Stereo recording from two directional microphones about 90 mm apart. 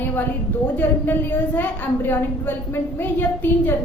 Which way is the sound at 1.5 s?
20° left (ahead or behind).